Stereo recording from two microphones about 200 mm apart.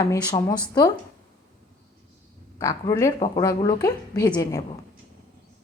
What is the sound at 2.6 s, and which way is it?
A woman's voice, 15° left (ahead or behind).